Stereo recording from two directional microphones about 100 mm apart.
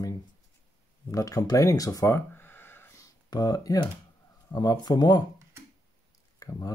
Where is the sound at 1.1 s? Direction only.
35° left (ahead or behind).